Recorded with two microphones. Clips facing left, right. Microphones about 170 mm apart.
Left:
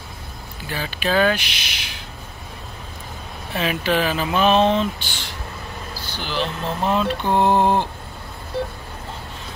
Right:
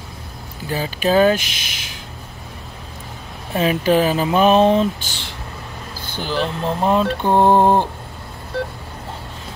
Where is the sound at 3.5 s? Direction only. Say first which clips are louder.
Right 5 dB; 40° right (ahead or behind).